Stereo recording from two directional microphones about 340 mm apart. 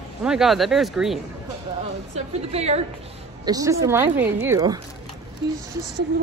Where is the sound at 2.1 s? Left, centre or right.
Centre.